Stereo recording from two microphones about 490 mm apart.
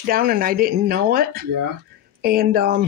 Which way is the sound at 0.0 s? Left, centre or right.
Centre.